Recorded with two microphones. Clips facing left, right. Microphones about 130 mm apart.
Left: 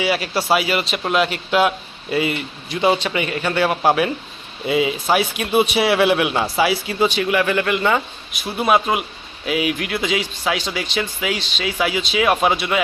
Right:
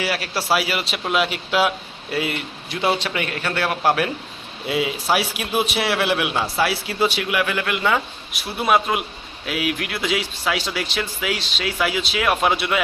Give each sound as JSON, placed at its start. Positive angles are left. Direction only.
{"t": 0.0, "sound": "speech", "side_deg": 0}